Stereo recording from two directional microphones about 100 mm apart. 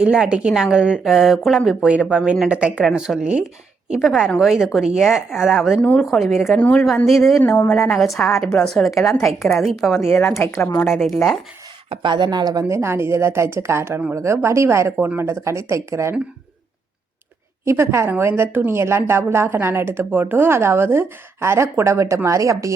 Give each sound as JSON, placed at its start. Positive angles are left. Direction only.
{"t": 0.0, "sound": "a woman's voice", "side_deg": -10}
{"t": 5.8, "sound": "speech", "side_deg": 10}
{"t": 6.6, "sound": "a woman's voice", "side_deg": 15}
{"t": 7.0, "sound": "a woman's voice", "side_deg": 0}
{"t": 10.1, "sound": "speech", "side_deg": 25}
{"t": 11.9, "sound": "a woman's voice", "side_deg": -50}
{"t": 17.7, "sound": "a woman's voice", "side_deg": -25}